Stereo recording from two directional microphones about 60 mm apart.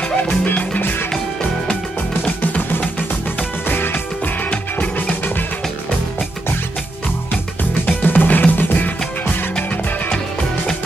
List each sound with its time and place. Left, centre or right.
0.7 s music: left
2.4 s music: left
8.0 s music: left